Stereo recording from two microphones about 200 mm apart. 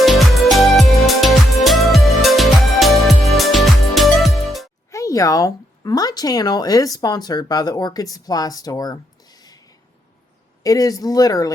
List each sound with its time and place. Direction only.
0.0 s music: centre (ahead or behind)
4.9 s speech: 15° left (ahead or behind)
10.6 s speech: 15° left (ahead or behind)